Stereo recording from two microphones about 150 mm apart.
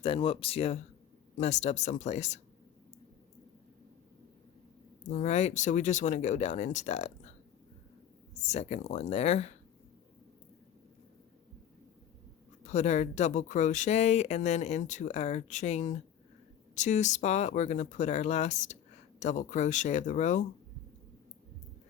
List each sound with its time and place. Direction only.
0.0 s speech: 40° left (ahead or behind)
5.0 s speech: 50° left (ahead or behind)
12.6 s speech: 50° left (ahead or behind)